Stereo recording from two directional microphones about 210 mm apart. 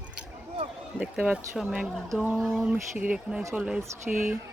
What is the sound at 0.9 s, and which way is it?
Speech, 5° right (ahead or behind).